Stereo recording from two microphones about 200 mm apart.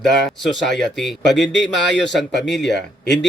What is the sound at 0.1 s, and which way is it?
Speech, centre (ahead or behind).